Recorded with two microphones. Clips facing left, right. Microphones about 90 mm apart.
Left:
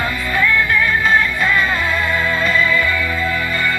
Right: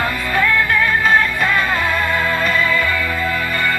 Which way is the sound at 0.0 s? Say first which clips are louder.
Right 1 dB; 55° right (ahead or behind).